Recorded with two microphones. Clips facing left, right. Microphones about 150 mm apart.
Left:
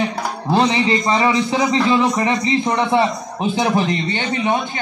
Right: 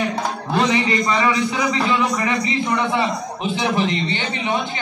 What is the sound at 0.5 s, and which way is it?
A man's voice, 30° left (ahead or behind).